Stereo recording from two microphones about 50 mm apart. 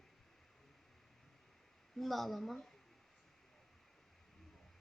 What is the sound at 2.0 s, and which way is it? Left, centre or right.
Speech, centre.